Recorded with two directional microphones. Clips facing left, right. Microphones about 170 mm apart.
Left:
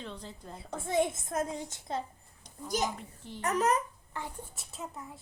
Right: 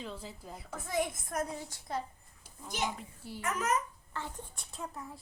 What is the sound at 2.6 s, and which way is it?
Speech, 40° left (ahead or behind).